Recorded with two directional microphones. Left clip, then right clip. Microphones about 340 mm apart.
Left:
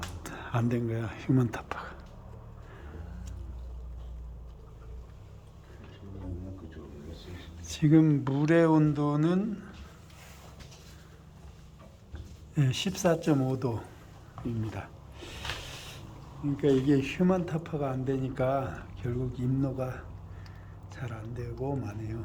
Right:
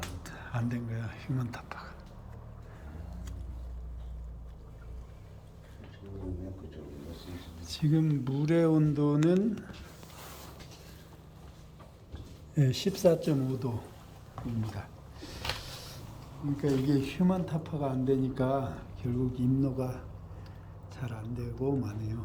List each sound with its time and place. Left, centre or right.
0.2 s speech: centre
7.6 s speech: centre
12.5 s speech: centre
14.8 s a sound: centre
16.6 s speech: centre